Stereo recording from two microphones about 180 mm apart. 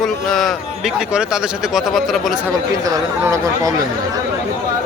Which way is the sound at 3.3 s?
20° right (ahead or behind).